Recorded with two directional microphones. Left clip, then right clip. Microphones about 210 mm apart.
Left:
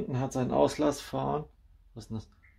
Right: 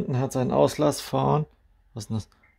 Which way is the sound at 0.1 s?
50° right (ahead or behind).